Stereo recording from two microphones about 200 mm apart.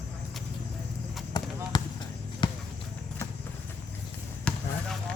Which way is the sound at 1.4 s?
20° left (ahead or behind).